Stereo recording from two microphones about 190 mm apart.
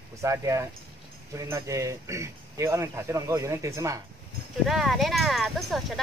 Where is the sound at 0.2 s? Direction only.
15° right (ahead or behind).